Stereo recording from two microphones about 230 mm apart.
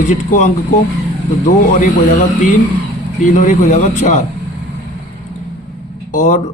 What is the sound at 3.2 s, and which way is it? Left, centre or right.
Speech, left.